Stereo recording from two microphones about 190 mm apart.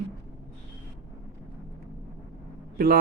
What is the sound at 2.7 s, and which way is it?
Speech, 50° right (ahead or behind).